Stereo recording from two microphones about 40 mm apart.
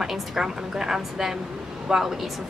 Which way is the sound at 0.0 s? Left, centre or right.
Centre.